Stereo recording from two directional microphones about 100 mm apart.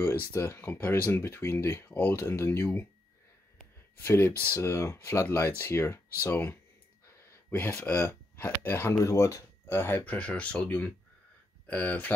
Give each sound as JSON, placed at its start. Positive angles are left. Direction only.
{"t": 0.3, "sound": "speech", "side_deg": 25}
{"t": 4.0, "sound": "speech", "side_deg": 20}